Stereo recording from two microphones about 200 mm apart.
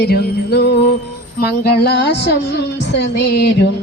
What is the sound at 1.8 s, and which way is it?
Music, 55° left (ahead or behind).